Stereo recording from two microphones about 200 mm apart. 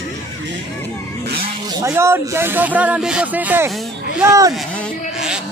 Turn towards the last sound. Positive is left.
turn(degrees=-15)  # may be behind; listen again after turning